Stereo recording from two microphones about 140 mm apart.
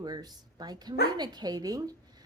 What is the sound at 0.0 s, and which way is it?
Speech, 30° right (ahead or behind).